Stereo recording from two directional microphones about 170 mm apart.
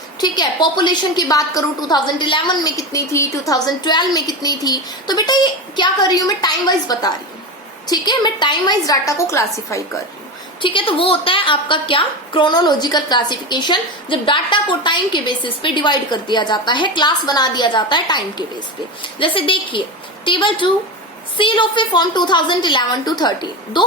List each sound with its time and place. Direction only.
0.2 s a woman's voice: 25° left (ahead or behind)
10.6 s a woman's voice: 30° left (ahead or behind)